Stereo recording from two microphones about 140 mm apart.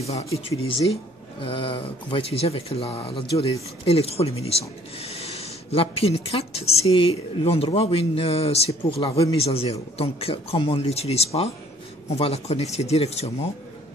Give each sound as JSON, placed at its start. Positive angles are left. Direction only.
{"t": 0.0, "sound": "speech", "side_deg": 45}